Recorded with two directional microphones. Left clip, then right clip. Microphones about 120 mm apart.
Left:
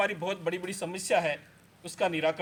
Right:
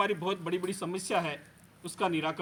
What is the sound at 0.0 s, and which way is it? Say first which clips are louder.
A man's voice: left 1 dB; 30° left (ahead or behind).